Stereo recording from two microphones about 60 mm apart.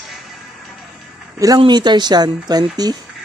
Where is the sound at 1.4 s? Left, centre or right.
Right.